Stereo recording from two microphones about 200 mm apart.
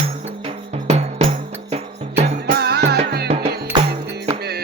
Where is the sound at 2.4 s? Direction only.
50° right (ahead or behind).